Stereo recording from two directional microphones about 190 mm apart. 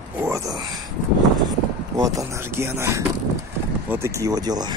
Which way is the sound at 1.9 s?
20° right (ahead or behind).